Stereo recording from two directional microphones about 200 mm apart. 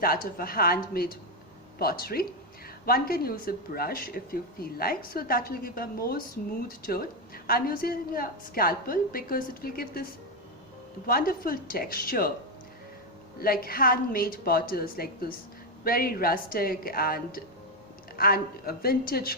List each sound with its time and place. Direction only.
0.0 s a woman's voice: 45° left (ahead or behind)
1.8 s a woman's voice: 50° left (ahead or behind)
13.4 s a woman's voice: 45° left (ahead or behind)